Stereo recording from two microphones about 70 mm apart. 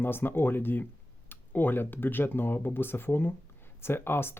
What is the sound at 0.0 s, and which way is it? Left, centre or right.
Speech, left.